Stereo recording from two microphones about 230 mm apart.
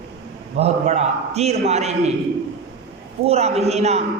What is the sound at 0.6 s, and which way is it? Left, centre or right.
A man's voice, right.